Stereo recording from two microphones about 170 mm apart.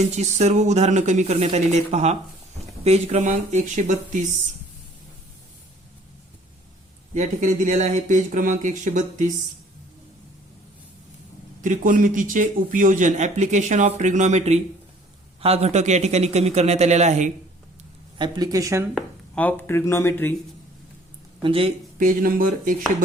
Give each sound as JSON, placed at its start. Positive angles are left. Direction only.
{"t": 0.1, "sound": "a man's voice", "side_deg": -40}
{"t": 7.1, "sound": "a man's voice", "side_deg": -45}
{"t": 11.6, "sound": "a man's voice", "side_deg": -50}
{"t": 18.2, "sound": "speech", "side_deg": -20}
{"t": 18.9, "sound": "speech", "side_deg": 10}
{"t": 21.4, "sound": "speech", "side_deg": -35}
{"t": 21.9, "sound": "a man's voice", "side_deg": -55}